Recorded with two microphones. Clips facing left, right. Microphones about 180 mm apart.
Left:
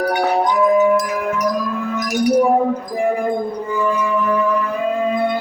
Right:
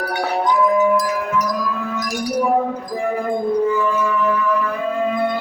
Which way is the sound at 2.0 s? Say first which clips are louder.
Left 9 dB; 20° left (ahead or behind).